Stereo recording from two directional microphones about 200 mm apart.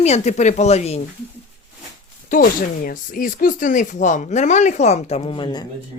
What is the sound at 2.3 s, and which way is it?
Speech, 40° left (ahead or behind).